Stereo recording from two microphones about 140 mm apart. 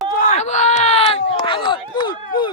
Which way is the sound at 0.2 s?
65° left (ahead or behind).